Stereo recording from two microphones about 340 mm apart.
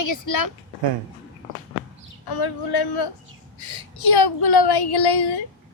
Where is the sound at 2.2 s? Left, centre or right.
Left.